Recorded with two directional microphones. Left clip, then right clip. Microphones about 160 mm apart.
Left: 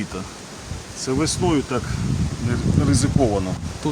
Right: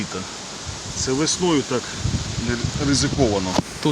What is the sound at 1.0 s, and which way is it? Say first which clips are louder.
Speech: right 1 dB; 20° left (ahead or behind).